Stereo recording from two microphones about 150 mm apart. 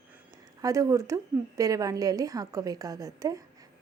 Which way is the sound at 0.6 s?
20° right (ahead or behind).